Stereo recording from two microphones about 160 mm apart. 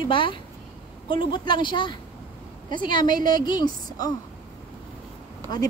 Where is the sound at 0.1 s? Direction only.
30° left (ahead or behind).